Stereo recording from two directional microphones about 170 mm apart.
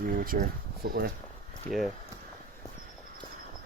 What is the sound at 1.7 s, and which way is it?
Speech, 10° left (ahead or behind).